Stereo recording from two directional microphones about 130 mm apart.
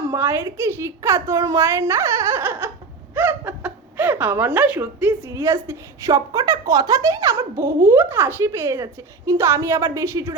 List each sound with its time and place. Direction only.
0.1 s a woman's voice: 20° right (ahead or behind)
3.2 s chuckle: 15° right (ahead or behind)
5.3 s a woman's voice: 20° right (ahead or behind)